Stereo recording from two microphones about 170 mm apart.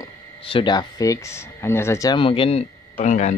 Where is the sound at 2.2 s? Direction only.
30° left (ahead or behind).